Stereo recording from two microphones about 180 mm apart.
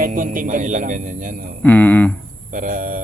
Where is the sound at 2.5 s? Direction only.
50° right (ahead or behind).